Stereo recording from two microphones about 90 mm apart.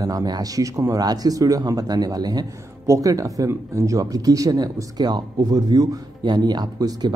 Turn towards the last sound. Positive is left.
turn(degrees=-50)  # may be behind; listen again after turning